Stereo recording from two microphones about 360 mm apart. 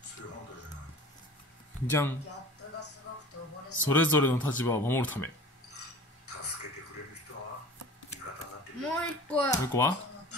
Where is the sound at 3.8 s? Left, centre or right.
Centre.